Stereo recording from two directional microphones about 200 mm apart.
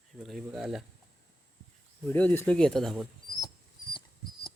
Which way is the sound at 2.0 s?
10° left (ahead or behind).